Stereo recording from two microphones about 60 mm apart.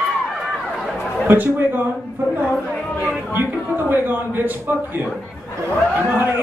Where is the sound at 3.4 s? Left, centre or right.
Right.